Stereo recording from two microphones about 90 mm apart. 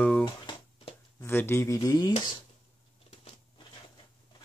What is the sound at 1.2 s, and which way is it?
Speech, 30° left (ahead or behind).